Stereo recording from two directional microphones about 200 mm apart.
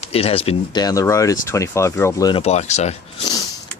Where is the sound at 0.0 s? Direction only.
30° left (ahead or behind).